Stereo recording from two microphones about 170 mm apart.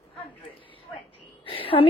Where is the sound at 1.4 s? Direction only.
30° left (ahead or behind).